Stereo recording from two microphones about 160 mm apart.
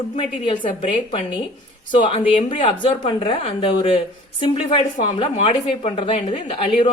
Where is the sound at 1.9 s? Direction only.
30° left (ahead or behind).